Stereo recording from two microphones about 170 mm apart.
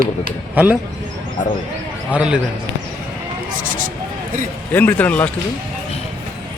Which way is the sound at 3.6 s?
55° right (ahead or behind).